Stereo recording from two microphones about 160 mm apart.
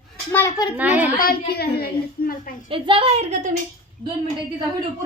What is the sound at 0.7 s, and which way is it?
Speech, 10° right (ahead or behind).